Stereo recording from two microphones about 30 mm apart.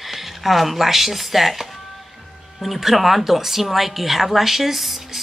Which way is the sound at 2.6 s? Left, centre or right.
Centre.